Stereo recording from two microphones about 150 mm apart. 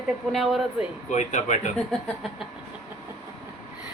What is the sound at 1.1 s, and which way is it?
Speech, 50° left (ahead or behind).